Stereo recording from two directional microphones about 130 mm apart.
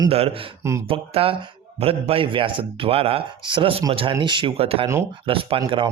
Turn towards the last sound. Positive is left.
turn(degrees=-45)  # may be behind; listen again after turning